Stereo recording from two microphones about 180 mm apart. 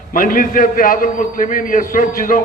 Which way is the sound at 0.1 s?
50° left (ahead or behind).